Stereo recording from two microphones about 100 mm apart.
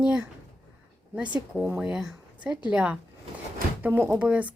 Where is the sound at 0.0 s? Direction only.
10° right (ahead or behind).